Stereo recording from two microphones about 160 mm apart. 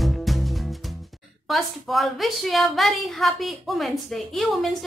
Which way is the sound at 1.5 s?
Centre (ahead or behind).